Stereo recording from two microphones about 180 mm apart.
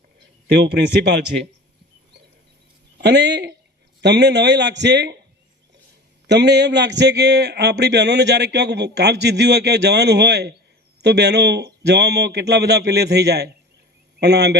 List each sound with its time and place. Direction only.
0.4 s a man's voice: 65° right (ahead or behind)
3.0 s a man's voice: 70° right (ahead or behind)
6.2 s a man's voice: 70° right (ahead or behind)